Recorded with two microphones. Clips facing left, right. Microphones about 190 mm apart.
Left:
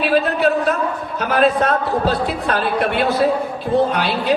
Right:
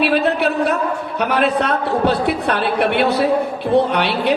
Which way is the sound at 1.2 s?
65° right (ahead or behind).